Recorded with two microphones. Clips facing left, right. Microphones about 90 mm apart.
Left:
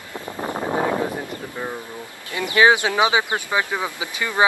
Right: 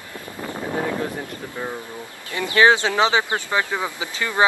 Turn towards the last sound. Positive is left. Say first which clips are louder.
# even
turn(degrees=15)  # may be behind; listen again after turning